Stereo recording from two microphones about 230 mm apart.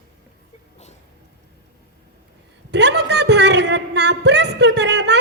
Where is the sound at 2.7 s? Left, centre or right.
Right.